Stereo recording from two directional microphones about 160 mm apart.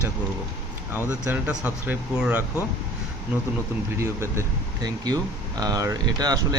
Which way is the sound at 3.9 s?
15° right (ahead or behind).